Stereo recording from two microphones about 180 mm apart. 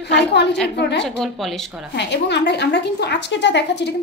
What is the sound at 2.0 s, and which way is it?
A woman's voice, 70° left (ahead or behind).